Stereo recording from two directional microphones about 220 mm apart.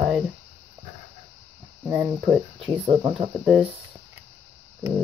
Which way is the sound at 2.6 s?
25° right (ahead or behind).